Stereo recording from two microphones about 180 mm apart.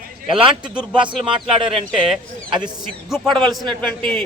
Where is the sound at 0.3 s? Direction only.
30° right (ahead or behind).